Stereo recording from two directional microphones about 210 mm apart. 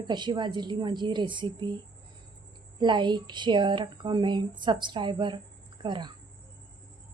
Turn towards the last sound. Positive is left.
turn(degrees=-20)  # may be behind; listen again after turning